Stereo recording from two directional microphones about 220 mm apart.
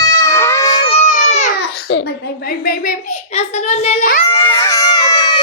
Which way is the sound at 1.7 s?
45° left (ahead or behind).